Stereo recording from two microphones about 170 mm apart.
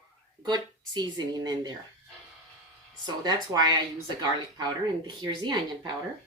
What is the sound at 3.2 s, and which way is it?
Speech, 25° right (ahead or behind).